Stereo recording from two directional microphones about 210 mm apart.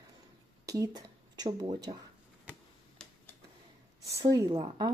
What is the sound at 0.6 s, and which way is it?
Speech, 15° right (ahead or behind).